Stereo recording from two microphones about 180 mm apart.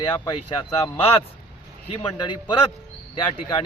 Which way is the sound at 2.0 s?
25° left (ahead or behind).